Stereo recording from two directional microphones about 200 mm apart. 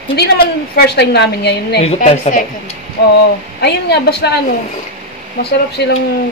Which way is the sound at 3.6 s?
55° left (ahead or behind).